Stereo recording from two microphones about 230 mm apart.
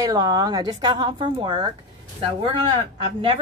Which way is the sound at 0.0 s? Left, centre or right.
Centre.